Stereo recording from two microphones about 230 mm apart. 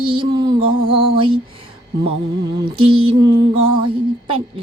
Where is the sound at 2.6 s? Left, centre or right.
Right.